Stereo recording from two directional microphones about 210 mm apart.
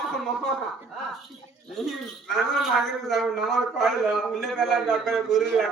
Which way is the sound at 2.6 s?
Centre (ahead or behind).